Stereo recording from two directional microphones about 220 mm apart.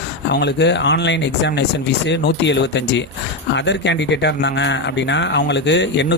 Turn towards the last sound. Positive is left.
turn(degrees=55)  # may be behind; listen again after turning